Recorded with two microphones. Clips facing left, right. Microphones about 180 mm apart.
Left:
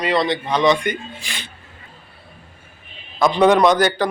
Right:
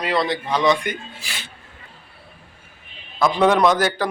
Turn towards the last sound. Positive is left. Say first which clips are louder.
# left 2 dB
turn(degrees=-5)  # may be behind; listen again after turning